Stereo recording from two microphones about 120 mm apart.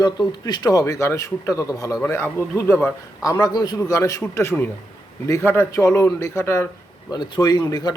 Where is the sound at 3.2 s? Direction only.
35° left (ahead or behind).